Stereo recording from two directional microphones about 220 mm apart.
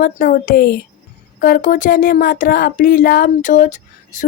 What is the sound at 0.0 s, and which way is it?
Speech, 40° left (ahead or behind).